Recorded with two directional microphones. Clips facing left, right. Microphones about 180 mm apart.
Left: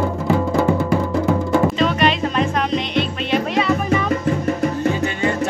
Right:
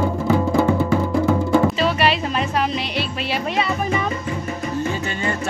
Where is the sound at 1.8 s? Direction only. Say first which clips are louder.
Left 2 dB; 5° right (ahead or behind).